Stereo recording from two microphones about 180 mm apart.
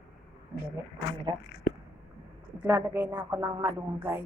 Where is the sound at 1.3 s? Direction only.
30° right (ahead or behind).